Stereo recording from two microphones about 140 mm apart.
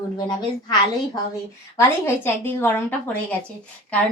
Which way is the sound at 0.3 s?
30° left (ahead or behind).